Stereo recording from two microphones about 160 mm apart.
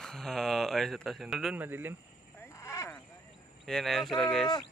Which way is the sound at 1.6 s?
10° right (ahead or behind).